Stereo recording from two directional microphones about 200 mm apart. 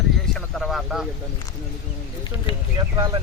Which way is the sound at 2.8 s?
20° right (ahead or behind).